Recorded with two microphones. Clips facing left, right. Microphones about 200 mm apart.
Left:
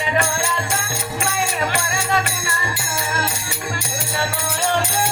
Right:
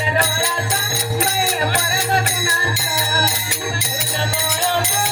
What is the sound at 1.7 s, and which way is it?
Music, 35° right (ahead or behind).